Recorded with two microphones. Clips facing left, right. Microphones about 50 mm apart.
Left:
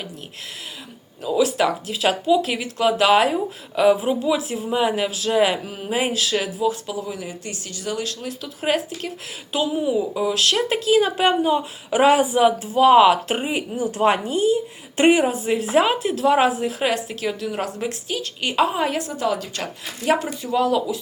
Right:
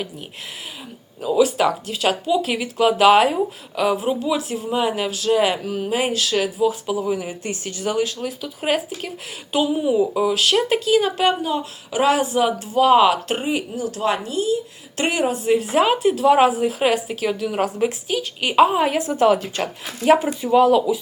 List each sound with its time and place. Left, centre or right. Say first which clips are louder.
1.2 s speech: right 2 dB; centre
7.4 s speech: right 5 dB; right
8.2 s speech: right 1 dB; centre
11.3 s speech: left 2 dB; centre
15.2 s speech: right 2 dB; centre
19.1 s a woman's voice: right 7 dB; right
20.2 s speech: right 6 dB; centre